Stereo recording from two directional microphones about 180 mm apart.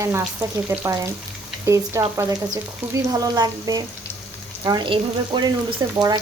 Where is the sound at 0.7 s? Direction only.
10° right (ahead or behind).